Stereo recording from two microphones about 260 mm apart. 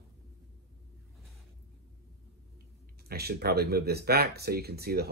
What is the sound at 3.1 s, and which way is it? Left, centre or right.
Speech, right.